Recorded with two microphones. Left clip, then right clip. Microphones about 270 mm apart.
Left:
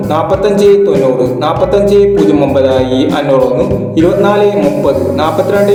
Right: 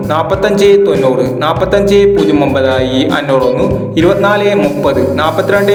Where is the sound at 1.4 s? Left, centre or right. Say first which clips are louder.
Left 1 dB; right.